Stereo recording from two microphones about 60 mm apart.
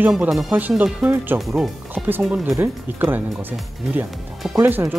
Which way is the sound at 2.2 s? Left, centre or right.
Centre.